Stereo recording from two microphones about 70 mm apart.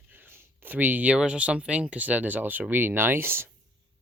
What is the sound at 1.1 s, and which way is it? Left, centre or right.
Speech, centre.